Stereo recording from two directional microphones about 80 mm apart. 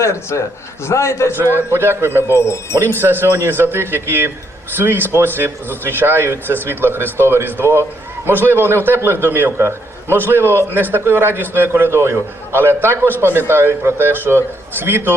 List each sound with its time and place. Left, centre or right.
0.0 s a man's voice: left
1.4 s a man's voice: right
2.2 s a man's voice: left
3.0 s speech: right